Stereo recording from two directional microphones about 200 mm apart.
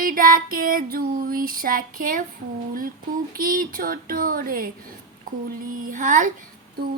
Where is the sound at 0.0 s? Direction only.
45° right (ahead or behind).